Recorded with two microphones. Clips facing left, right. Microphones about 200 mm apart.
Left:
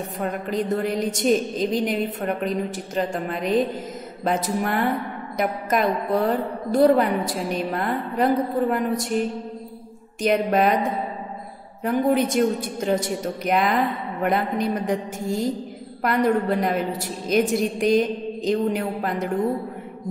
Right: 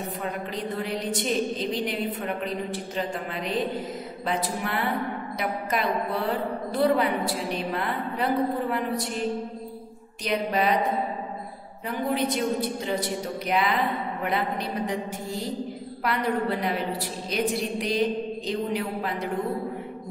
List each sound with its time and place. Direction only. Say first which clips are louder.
0.2 s a woman's voice: left 9 dB; 45° left (ahead or behind)
10.2 s a woman's voice: left 6 dB; 50° left (ahead or behind)
11.8 s a woman's voice: left 7 dB; 50° left (ahead or behind)